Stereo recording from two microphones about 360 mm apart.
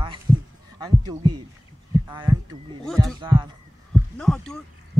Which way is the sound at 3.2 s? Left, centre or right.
Centre.